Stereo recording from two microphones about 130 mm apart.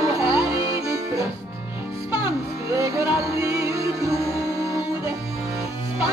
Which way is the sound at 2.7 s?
25° right (ahead or behind).